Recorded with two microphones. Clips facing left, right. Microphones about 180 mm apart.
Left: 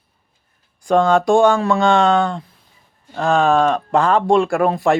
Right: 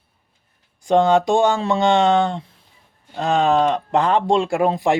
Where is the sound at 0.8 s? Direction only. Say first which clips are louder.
Left 1 dB; 20° right (ahead or behind).